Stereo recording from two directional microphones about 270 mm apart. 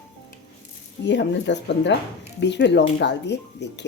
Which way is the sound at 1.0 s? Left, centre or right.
Left.